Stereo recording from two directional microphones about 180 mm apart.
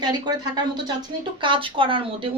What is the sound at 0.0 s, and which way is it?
Speech, 25° right (ahead or behind).